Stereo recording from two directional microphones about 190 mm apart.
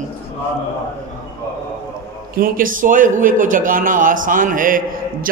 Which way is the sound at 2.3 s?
50° right (ahead or behind).